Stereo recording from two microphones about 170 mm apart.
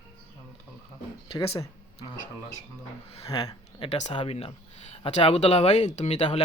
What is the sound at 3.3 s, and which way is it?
Speech, 30° left (ahead or behind).